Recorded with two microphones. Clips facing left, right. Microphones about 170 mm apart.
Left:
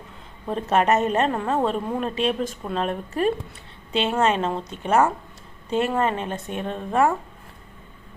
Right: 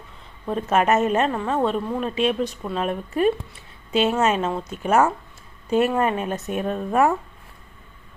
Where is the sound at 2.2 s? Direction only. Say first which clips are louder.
Right 4 dB; 40° left (ahead or behind).